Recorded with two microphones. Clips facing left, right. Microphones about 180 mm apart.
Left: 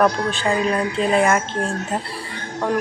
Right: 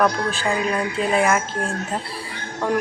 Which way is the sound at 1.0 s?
5° right (ahead or behind).